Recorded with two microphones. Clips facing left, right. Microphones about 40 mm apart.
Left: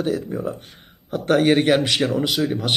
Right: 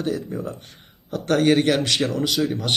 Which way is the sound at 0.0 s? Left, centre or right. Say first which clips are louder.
Left 3 dB; centre.